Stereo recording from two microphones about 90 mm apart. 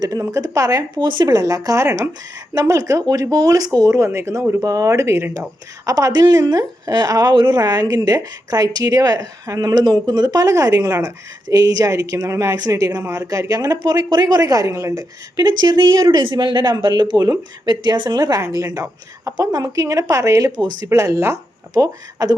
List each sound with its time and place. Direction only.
0.0 s speech: 40° right (ahead or behind); by 5.5 s 25° right (ahead or behind)
5.8 s a woman's voice: 40° right (ahead or behind)
7.3 s speech: 60° right (ahead or behind)
7.6 s a woman's voice: 45° right (ahead or behind)
15.4 s a woman's voice: 55° right (ahead or behind)
20.6 s a woman's voice: 50° right (ahead or behind)
20.8 s speech: 35° right (ahead or behind)